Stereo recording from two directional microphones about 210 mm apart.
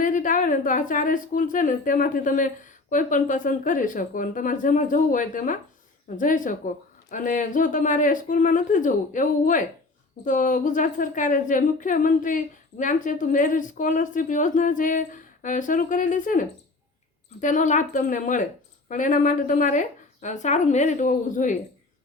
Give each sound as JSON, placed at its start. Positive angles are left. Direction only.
{"t": 0.0, "sound": "a woman's voice", "side_deg": 40}